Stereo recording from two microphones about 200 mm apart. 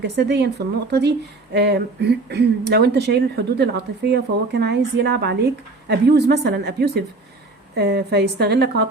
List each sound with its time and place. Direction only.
0.0 s speech: 55° right (ahead or behind)